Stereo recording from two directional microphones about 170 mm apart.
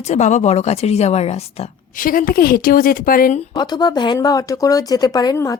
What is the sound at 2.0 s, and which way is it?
A woman's voice, 55° left (ahead or behind).